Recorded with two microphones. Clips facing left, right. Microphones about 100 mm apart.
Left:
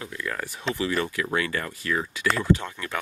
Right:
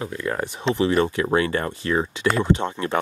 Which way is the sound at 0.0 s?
30° right (ahead or behind).